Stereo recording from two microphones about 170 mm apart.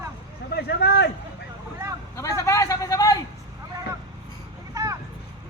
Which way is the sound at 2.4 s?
20° left (ahead or behind).